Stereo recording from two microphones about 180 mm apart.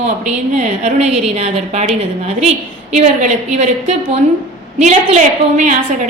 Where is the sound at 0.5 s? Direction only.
40° right (ahead or behind).